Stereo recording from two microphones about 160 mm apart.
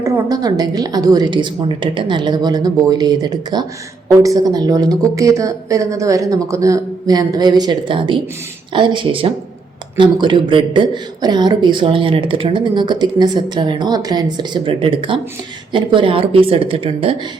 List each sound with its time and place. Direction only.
0.0 s a woman's voice: 20° right (ahead or behind)